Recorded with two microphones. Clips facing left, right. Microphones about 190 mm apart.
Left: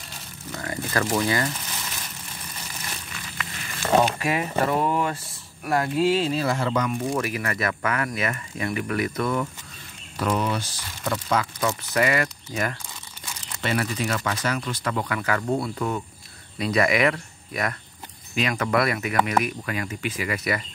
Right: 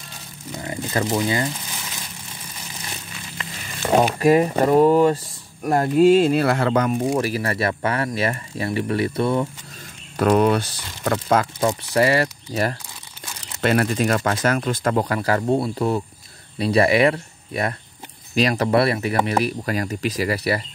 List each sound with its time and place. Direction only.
0.5 s speech: 20° right (ahead or behind)
3.7 s speech: 15° right (ahead or behind)
4.2 s speech: 40° right (ahead or behind); by 6.9 s 60° right (ahead or behind)
7.2 s speech: 30° right (ahead or behind)
10.1 s speech: 55° right (ahead or behind)
11.6 s speech: 30° right (ahead or behind)
13.6 s speech: 55° right (ahead or behind); by 20.6 s 35° right (ahead or behind)